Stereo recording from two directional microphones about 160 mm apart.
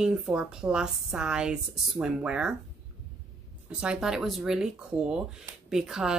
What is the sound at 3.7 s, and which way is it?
A woman's voice, 5° right (ahead or behind).